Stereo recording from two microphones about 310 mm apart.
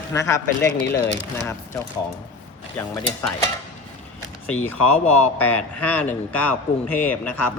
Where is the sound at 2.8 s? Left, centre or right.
Centre.